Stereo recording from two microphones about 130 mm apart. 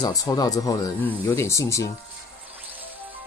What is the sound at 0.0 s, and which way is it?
Speech, 30° left (ahead or behind).